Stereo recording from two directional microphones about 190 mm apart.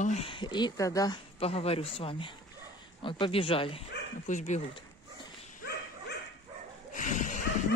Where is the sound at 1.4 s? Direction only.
30° left (ahead or behind).